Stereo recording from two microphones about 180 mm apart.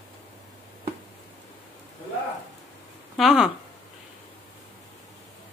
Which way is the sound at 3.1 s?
Centre (ahead or behind).